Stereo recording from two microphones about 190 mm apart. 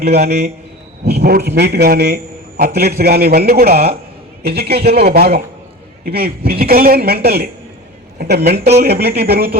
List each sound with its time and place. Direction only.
0.0 s a man's voice: 55° right (ahead or behind)